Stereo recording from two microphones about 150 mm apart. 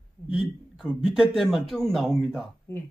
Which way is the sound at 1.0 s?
5° right (ahead or behind).